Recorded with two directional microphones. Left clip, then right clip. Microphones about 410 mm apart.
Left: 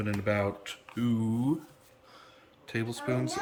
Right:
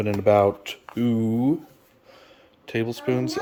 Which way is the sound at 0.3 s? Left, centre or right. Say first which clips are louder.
Right 13 dB; right.